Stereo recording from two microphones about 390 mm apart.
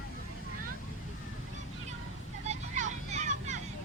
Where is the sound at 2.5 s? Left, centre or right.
Centre.